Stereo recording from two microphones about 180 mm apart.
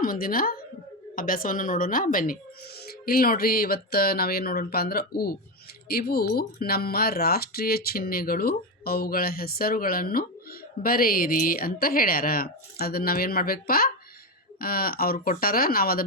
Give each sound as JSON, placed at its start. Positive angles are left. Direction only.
{"t": 0.0, "sound": "a woman's voice", "side_deg": 50}